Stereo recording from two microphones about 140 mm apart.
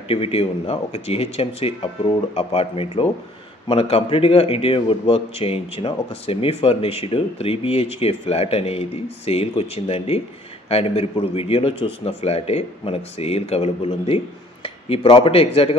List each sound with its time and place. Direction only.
0.1 s a man's voice: 45° left (ahead or behind)